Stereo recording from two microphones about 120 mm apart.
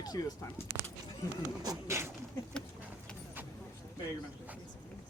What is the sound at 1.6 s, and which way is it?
Speech, 30° right (ahead or behind).